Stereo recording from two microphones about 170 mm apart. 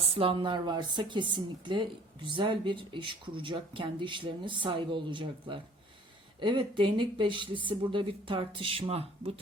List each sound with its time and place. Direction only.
0.2 s speech: 30° right (ahead or behind)